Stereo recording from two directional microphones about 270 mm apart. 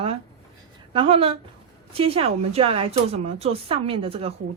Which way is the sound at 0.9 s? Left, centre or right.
Right.